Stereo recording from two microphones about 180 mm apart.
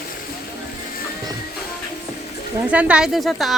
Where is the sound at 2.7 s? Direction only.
5° right (ahead or behind).